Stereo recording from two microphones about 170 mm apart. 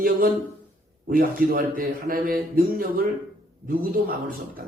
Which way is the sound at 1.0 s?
60° right (ahead or behind).